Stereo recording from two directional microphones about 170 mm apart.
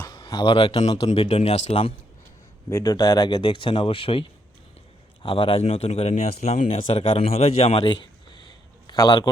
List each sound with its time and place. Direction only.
0.1 s speech: 25° left (ahead or behind)
2.6 s a man's voice: 20° left (ahead or behind)